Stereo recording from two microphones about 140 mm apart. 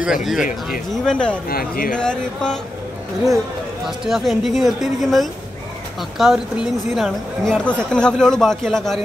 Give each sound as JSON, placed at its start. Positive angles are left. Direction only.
{"t": 0.0, "sound": "a woman's voice", "side_deg": -5}
{"t": 1.0, "sound": "speech", "side_deg": 5}
{"t": 1.5, "sound": "speech", "side_deg": 90}
{"t": 2.0, "sound": "a woman's voice", "side_deg": 5}
{"t": 3.8, "sound": "a woman's voice", "side_deg": 0}